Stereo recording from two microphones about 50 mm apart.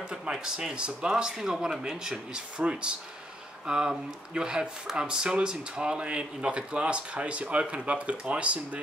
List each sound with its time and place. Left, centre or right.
0.1 s speech: centre
1.1 s speech: centre; by 8.5 s right